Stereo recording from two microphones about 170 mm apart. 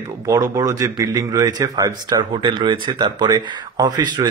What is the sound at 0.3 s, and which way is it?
Speech, 20° right (ahead or behind).